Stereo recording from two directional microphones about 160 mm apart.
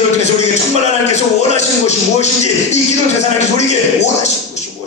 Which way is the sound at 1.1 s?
45° left (ahead or behind).